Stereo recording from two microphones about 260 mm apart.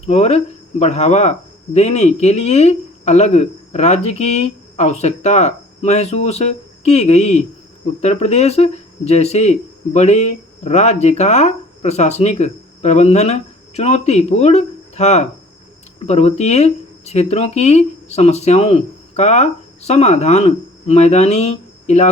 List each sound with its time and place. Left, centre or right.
0.0 s speech: left